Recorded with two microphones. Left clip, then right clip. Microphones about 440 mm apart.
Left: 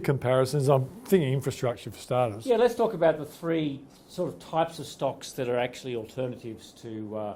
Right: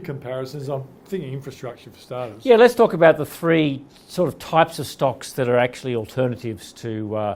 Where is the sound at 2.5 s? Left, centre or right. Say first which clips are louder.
Right 12 dB; right.